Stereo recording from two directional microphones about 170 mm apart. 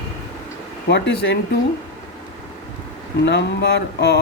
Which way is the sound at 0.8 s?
90° left.